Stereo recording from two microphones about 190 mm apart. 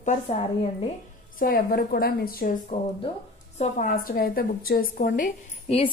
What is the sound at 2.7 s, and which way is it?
A woman's voice, 35° left (ahead or behind).